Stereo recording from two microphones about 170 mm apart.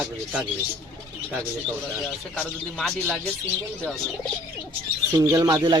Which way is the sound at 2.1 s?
5° left (ahead or behind).